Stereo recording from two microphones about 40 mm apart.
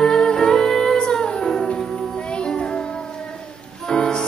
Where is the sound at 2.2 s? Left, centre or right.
Left.